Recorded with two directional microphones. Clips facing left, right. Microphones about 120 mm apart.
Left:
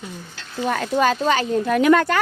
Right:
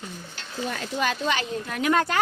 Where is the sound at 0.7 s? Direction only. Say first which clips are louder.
Left 9 dB; 65° left (ahead or behind).